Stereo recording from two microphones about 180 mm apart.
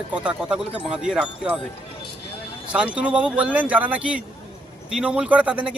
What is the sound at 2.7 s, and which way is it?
A man's voice, 5° right (ahead or behind).